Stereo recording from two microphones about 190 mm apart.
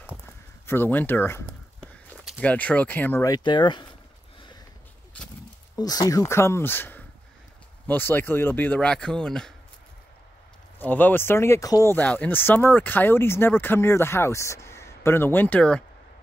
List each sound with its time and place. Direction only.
0.7 s speech: 10° left (ahead or behind)
5.8 s speech: 20° left (ahead or behind); by 9.5 s 5° left (ahead or behind)
10.8 s speech: 10° left (ahead or behind)